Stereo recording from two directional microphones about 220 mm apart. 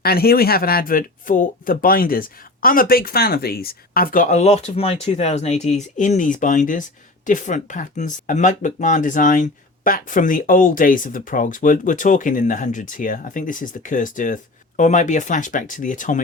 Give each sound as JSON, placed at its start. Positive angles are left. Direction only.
{"t": 0.0, "sound": "speech", "side_deg": 45}